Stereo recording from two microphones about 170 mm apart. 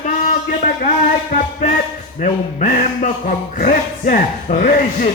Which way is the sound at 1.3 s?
50° left (ahead or behind).